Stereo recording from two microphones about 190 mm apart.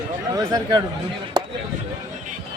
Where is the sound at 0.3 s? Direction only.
20° right (ahead or behind).